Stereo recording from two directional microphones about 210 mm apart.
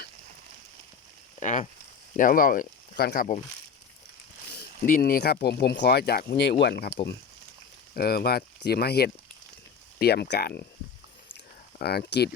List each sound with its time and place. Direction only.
1.4 s speech: 35° left (ahead or behind)
4.9 s speech: 45° left (ahead or behind)
11.8 s speech: 50° left (ahead or behind)